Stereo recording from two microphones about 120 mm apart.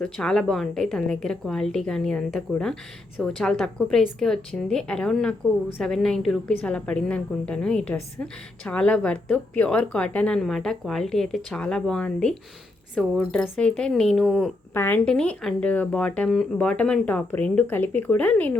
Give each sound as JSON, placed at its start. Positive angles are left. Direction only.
{"t": 0.0, "sound": "a woman's voice", "side_deg": 5}
{"t": 14.7, "sound": "a woman's voice", "side_deg": 15}